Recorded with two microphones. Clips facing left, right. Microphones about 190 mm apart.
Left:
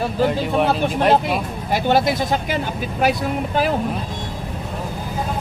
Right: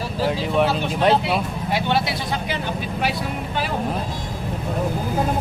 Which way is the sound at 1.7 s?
45° left (ahead or behind).